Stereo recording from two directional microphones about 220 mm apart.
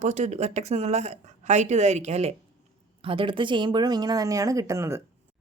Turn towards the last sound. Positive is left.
turn(degrees=-15)  # may be behind; listen again after turning